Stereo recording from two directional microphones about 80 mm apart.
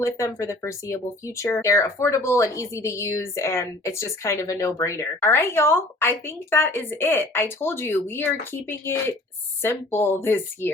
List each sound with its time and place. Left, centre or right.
0.0 s speech: left